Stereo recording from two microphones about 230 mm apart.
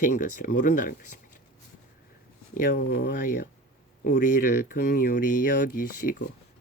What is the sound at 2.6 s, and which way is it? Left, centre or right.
Speech, left.